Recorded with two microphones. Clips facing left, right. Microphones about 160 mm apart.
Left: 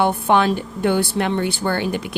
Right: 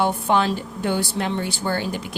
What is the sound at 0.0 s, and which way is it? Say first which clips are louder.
Speech: left 3 dB; 60° left (ahead or behind).